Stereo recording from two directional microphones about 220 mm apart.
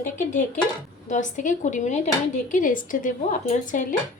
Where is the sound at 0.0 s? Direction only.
35° left (ahead or behind).